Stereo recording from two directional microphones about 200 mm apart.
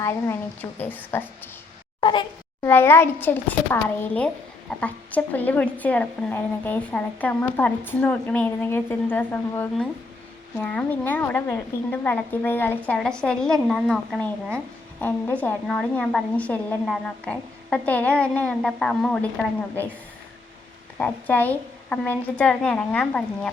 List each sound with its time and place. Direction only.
0.0 s speech: 15° left (ahead or behind)
2.0 s speech: 25° left (ahead or behind)
2.6 s a woman's voice: 10° left (ahead or behind)
21.0 s a woman's voice: 10° left (ahead or behind)